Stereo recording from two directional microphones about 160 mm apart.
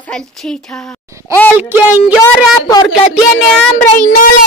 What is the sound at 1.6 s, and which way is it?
Speech, 15° right (ahead or behind).